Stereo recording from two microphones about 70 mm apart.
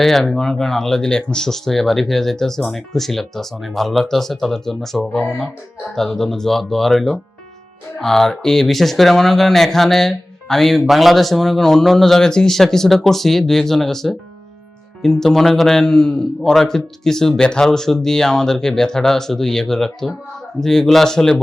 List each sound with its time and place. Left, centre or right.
0.0 s a man's voice: centre